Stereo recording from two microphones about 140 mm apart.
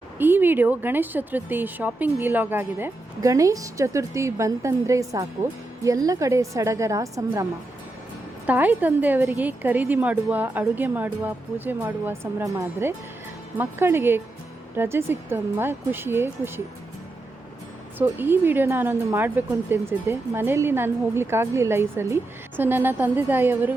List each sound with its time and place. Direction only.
0.2 s a woman's voice: 15° right (ahead or behind)
8.4 s a woman's voice: 15° right (ahead or behind)
17.9 s a woman's voice: 15° right (ahead or behind)